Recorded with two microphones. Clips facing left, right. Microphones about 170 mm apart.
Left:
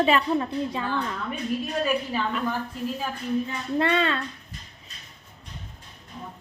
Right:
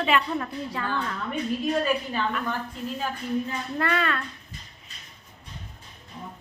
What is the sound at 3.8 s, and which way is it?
Speech, 25° left (ahead or behind).